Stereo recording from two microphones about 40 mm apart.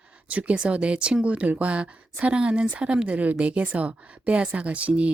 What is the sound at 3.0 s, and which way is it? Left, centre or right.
Speech, right.